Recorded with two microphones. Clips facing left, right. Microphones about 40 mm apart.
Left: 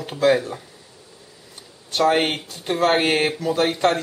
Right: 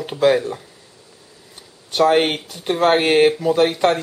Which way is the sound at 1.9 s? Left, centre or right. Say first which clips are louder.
Right 3 dB; centre.